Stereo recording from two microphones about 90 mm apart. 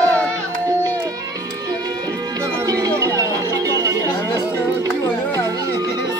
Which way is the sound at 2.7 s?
40° right (ahead or behind).